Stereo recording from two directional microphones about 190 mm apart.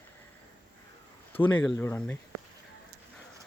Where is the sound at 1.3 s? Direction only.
10° left (ahead or behind).